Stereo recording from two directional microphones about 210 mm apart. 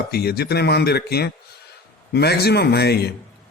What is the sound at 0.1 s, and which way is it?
A man's voice, 50° left (ahead or behind).